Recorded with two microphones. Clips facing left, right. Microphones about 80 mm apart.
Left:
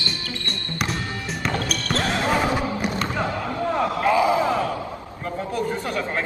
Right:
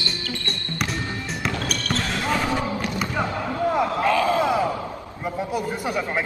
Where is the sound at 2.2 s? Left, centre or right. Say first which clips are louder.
Even; centre.